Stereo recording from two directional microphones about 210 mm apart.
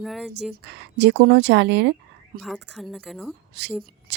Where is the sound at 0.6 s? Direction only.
55° right (ahead or behind).